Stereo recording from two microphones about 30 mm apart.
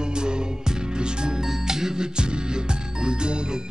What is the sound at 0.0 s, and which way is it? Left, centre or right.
Music, right.